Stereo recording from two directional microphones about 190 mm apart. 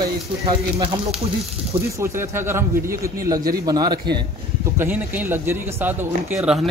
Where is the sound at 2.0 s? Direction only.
15° right (ahead or behind).